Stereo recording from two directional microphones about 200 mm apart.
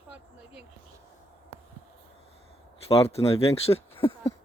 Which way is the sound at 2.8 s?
30° left (ahead or behind).